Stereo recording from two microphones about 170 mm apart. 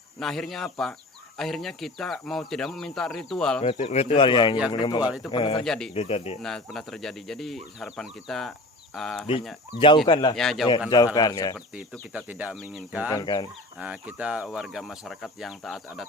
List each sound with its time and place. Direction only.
0.2 s speech: centre (ahead or behind)
3.6 s speech: 35° left (ahead or behind)
5.6 s speech: 5° left (ahead or behind)
5.9 s speech: 35° left (ahead or behind)
6.4 s speech: centre (ahead or behind)
9.7 s speech: 30° left (ahead or behind)
10.3 s speech: centre (ahead or behind)
10.7 s speech: 20° left (ahead or behind)
11.7 s speech: 5° right (ahead or behind)
13.1 s speech: 20° left (ahead or behind)
13.7 s speech: 5° right (ahead or behind)